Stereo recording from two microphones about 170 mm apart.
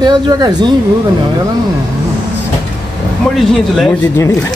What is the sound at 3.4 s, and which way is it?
Speech, 5° left (ahead or behind).